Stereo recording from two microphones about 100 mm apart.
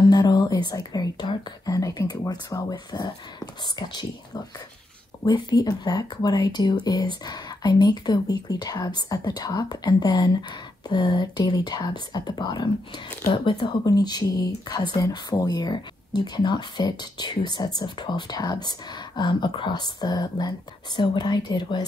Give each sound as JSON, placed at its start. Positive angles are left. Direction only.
{"t": 0.1, "sound": "speech", "side_deg": 40}